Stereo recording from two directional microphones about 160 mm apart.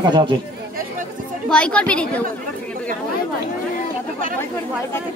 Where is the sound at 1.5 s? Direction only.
5° left (ahead or behind).